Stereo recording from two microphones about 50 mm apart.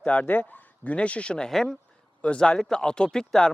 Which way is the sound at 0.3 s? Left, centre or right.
Left.